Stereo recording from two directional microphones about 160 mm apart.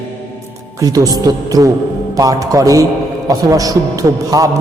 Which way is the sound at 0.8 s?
20° right (ahead or behind).